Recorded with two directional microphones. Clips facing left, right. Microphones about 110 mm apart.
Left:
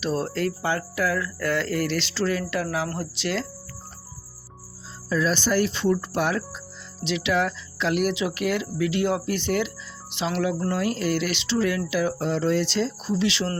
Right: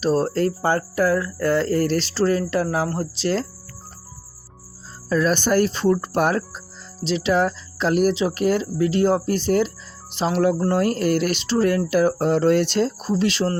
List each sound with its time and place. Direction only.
0.0 s speech: 40° right (ahead or behind)
5.0 s speech: 50° right (ahead or behind)